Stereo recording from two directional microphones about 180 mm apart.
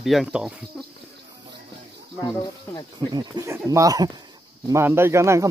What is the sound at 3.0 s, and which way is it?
Speech, 25° right (ahead or behind).